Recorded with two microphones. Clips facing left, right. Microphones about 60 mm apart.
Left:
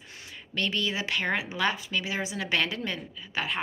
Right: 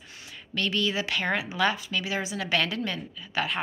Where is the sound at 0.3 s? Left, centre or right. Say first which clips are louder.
Right 1 dB; centre.